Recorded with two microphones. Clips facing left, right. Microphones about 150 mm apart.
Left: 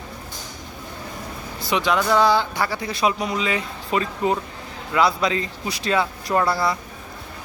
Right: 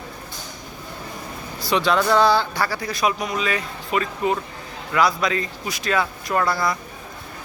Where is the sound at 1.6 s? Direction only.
15° left (ahead or behind).